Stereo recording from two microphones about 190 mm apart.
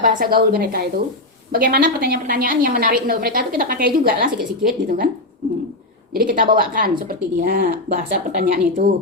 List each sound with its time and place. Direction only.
0.0 s a woman's voice: 50° right (ahead or behind)
6.1 s a woman's voice: 45° right (ahead or behind)